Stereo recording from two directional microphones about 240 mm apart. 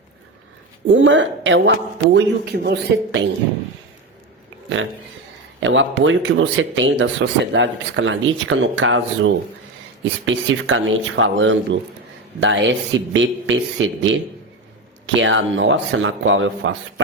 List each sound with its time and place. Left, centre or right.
0.9 s speech: right
5.5 s speech: right